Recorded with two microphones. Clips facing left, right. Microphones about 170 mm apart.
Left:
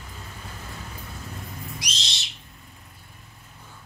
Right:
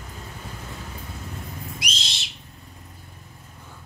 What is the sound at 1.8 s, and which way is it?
Owl, 55° right (ahead or behind).